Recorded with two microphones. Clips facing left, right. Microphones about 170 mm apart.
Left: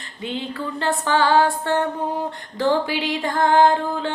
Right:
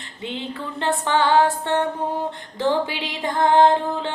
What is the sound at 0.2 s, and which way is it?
Music, 20° right (ahead or behind).